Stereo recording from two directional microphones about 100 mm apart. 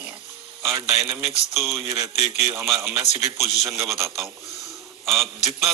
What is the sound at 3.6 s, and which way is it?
Speech, 30° right (ahead or behind).